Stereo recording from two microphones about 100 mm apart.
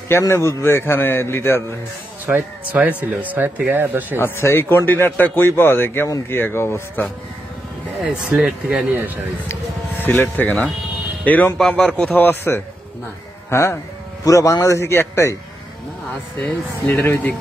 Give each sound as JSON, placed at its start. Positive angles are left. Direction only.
{"t": 0.2, "sound": "speech", "side_deg": 25}
{"t": 2.2, "sound": "speech", "side_deg": -15}
{"t": 4.2, "sound": "speech", "side_deg": 25}
{"t": 8.4, "sound": "speech", "side_deg": -10}
{"t": 10.0, "sound": "speech", "side_deg": 20}
{"t": 12.2, "sound": "speech", "side_deg": 20}
{"t": 16.3, "sound": "speech", "side_deg": 20}